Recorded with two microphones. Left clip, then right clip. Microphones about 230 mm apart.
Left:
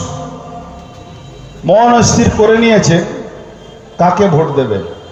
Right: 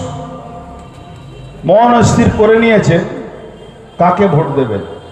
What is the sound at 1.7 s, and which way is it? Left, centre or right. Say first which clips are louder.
A man's voice: even; left.